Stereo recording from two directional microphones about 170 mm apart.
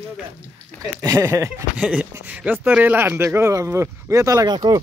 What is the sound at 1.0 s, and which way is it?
Speech, 20° right (ahead or behind).